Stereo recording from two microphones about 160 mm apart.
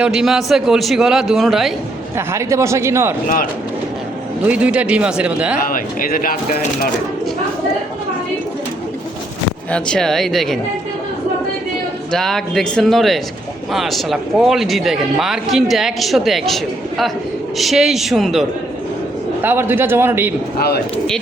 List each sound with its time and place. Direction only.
0.0 s speech: centre (ahead or behind)
2.1 s speech: 15° right (ahead or behind)
4.4 s speech: 10° right (ahead or behind)
5.7 s speech: 60° left (ahead or behind)
9.7 s speech: 5° left (ahead or behind)
12.1 s speech: 5° left (ahead or behind)
17.6 s speech: centre (ahead or behind)
19.4 s speech: 15° right (ahead or behind)
20.6 s a man's voice: 85° left